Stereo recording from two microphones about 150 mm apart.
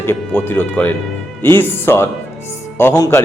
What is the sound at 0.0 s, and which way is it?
Speech, 15° left (ahead or behind).